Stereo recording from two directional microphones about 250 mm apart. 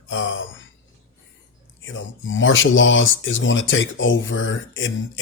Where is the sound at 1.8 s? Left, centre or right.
Left.